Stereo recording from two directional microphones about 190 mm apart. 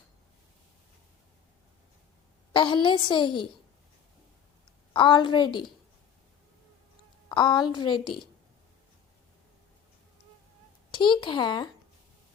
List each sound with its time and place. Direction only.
2.5 s a woman's voice: 25° left (ahead or behind)
4.9 s a woman's voice: 25° left (ahead or behind)
7.3 s a woman's voice: 25° left (ahead or behind)
10.9 s a woman's voice: 25° left (ahead or behind)